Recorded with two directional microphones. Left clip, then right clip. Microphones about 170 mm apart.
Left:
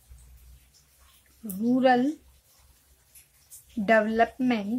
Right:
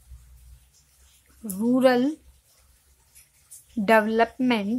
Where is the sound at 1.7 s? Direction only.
30° right (ahead or behind).